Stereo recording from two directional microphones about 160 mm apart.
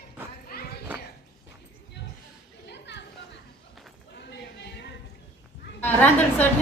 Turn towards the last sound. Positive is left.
turn(degrees=10)  # may be behind; listen again after turning